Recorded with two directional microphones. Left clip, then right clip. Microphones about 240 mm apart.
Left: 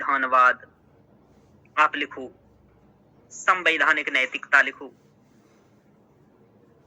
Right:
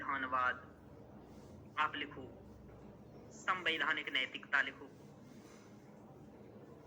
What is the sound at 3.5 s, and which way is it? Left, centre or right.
Speech, left.